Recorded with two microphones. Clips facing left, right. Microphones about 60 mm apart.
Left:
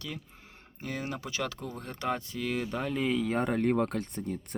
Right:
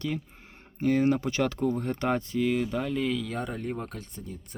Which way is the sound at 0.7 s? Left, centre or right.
Right.